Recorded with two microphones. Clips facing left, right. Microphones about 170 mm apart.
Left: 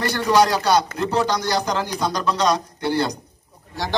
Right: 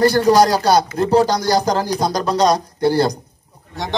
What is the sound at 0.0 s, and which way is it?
Speech, 35° right (ahead or behind).